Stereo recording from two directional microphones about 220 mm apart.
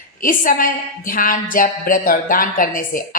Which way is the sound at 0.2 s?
40° left (ahead or behind).